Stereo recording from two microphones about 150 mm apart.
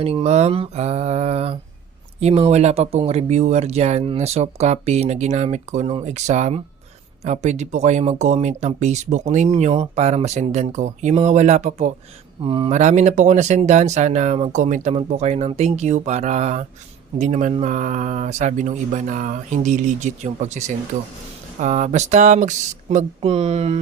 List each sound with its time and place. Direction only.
0.0 s speech: 45° right (ahead or behind)
12.5 s speech: 35° right (ahead or behind)
12.7 s speech: 50° right (ahead or behind)